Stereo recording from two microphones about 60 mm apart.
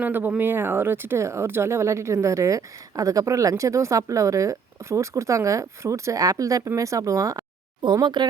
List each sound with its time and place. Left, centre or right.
0.0 s speech: right
6.7 s speech: right